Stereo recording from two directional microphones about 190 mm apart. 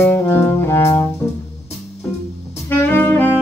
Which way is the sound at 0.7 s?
10° left (ahead or behind).